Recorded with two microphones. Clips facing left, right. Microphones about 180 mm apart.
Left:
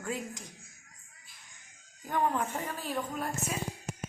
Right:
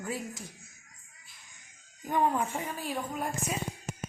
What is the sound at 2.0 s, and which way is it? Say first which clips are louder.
A woman's voice: right 2 dB; 10° right (ahead or behind).